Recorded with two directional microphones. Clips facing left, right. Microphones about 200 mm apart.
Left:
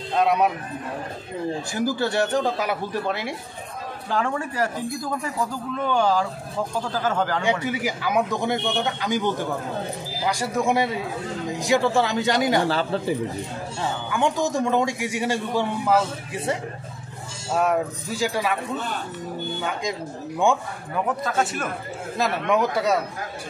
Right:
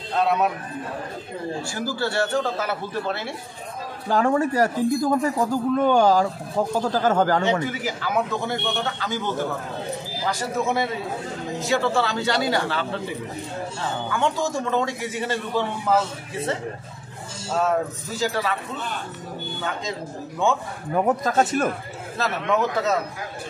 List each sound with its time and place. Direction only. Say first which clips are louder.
0.2 s speech: left 1 dB; 15° left (ahead or behind)
1.7 s speech: left 4 dB; 20° left (ahead or behind)
4.1 s a man's voice: right 6 dB; 40° right (ahead or behind)
7.6 s speech: left 2 dB; 10° left (ahead or behind)
12.6 s a man's voice: left 4 dB; 35° left (ahead or behind)
14.1 s speech: left 2 dB; 15° left (ahead or behind)
17.6 s speech: even; 15° left (ahead or behind)
20.9 s speech: right 4 dB; 40° right (ahead or behind)
22.2 s speech: left 1 dB; 10° left (ahead or behind)